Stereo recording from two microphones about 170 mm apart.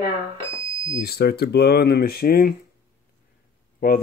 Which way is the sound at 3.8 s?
60° left (ahead or behind).